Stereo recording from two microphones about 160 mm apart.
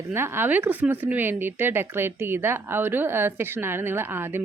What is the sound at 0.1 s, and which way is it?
Speech, 15° right (ahead or behind).